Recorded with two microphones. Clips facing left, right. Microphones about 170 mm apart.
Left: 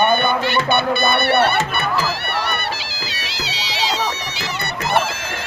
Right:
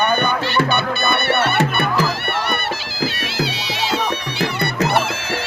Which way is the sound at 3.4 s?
55° right (ahead or behind).